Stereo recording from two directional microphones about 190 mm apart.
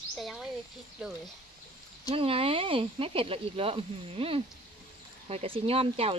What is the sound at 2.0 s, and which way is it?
Speech, 30° right (ahead or behind).